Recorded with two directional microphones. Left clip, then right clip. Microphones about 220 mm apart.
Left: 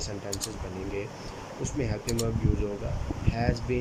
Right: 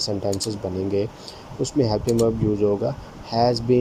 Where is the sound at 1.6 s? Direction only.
25° right (ahead or behind).